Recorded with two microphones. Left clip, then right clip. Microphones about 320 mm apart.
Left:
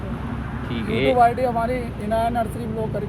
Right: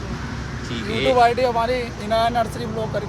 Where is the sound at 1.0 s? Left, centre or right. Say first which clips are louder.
Right 1 dB; centre.